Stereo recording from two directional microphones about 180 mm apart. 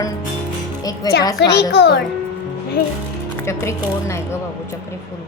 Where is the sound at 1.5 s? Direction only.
65° left (ahead or behind).